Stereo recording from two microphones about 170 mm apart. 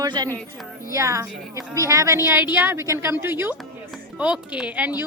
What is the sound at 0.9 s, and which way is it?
A woman's voice, 20° right (ahead or behind).